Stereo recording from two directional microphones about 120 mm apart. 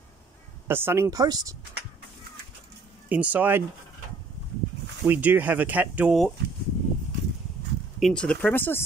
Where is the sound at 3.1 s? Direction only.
10° right (ahead or behind).